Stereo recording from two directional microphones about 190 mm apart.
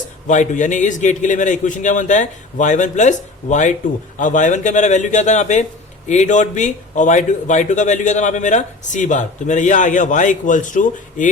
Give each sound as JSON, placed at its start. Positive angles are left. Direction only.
{"t": 0.3, "sound": "a man's voice", "side_deg": 40}